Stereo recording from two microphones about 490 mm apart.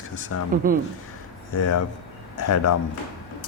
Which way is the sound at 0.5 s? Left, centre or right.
Centre.